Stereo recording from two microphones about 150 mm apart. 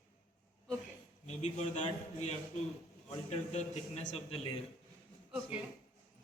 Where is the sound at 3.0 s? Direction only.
50° left (ahead or behind).